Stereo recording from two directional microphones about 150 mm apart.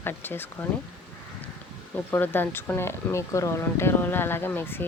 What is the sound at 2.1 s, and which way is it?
Speech, 15° left (ahead or behind).